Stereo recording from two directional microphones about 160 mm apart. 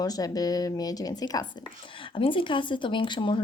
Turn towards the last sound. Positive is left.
turn(degrees=30)  # may be behind; listen again after turning